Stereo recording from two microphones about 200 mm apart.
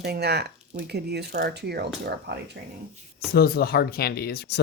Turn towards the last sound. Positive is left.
turn(degrees=55)  # may be behind; listen again after turning